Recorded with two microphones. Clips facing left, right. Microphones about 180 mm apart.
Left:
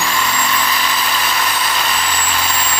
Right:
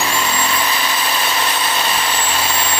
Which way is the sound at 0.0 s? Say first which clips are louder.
Even; 25° right (ahead or behind).